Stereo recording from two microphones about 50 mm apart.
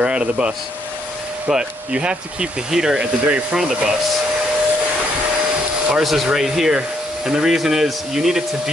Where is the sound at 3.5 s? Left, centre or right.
Centre.